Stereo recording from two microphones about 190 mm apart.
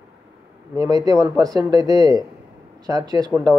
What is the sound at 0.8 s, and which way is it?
Speech, 20° right (ahead or behind).